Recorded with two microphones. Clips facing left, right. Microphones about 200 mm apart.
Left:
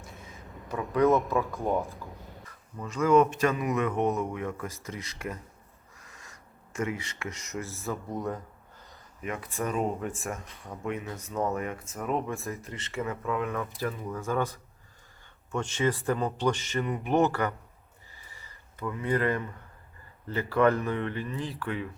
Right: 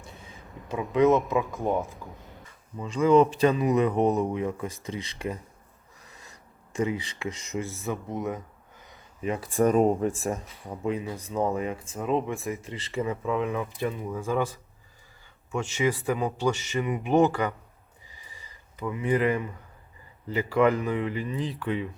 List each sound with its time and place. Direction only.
1.1 s speech: 20° right (ahead or behind)
1.7 s speech: centre (ahead or behind)
2.8 s a man's voice: 30° right (ahead or behind)
6.7 s a man's voice: 30° right (ahead or behind)
8.9 s a sound: 30° right (ahead or behind)
9.6 s a man's voice: 40° right (ahead or behind); by 12.4 s 20° right (ahead or behind)
12.4 s speech: centre (ahead or behind)
12.7 s a man's voice: 30° right (ahead or behind)
13.2 s speech: 20° right (ahead or behind)
15.5 s speech: 10° right (ahead or behind)
18.1 s a sound: 15° right (ahead or behind)
20.2 s speech: 15° right (ahead or behind)